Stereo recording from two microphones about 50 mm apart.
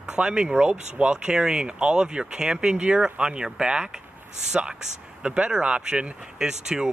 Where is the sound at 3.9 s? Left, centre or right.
Centre.